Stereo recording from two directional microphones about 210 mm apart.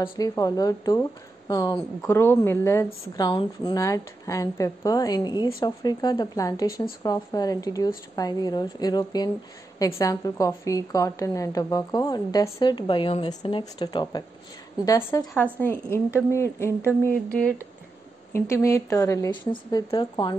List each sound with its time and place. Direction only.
0.0 s a woman's voice: 20° left (ahead or behind)